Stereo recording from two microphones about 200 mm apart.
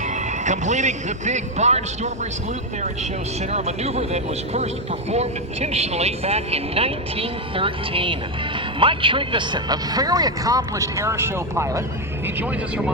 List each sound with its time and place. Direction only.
0.0 s speech: 35° right (ahead or behind)
3.5 s speech: 30° right (ahead or behind); by 12.9 s 5° right (ahead or behind)